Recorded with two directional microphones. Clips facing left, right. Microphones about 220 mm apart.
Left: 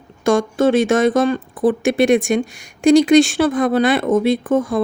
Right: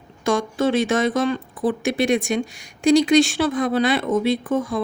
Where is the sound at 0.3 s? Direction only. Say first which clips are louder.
Left 5 dB; 50° left (ahead or behind).